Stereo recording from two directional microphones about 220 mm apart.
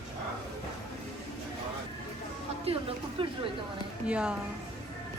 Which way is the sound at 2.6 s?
25° right (ahead or behind).